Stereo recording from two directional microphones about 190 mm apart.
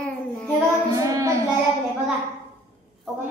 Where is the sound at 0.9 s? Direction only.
15° right (ahead or behind).